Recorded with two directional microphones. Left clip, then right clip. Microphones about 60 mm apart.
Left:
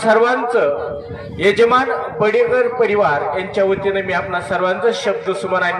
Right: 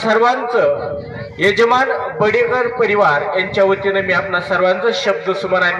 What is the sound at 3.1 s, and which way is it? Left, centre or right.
A man's voice, left.